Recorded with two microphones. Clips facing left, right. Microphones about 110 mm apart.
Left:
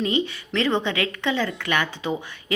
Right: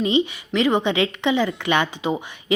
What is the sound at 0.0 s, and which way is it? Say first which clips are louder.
A woman's voice: right 4 dB; 15° right (ahead or behind).